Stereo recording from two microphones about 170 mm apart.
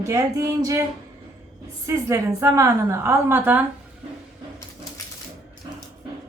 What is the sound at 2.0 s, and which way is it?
A woman's voice, 15° right (ahead or behind).